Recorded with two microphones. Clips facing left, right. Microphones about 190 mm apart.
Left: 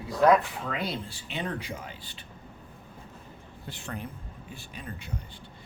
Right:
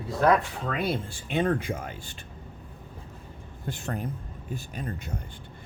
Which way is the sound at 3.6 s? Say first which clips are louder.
Right 6 dB; 45° right (ahead or behind).